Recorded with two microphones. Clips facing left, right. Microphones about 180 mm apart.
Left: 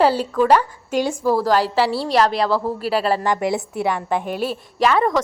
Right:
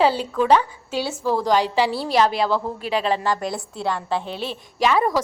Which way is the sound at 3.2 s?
20° left (ahead or behind).